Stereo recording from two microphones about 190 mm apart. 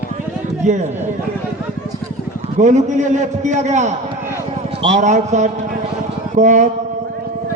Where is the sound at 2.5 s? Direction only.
40° right (ahead or behind).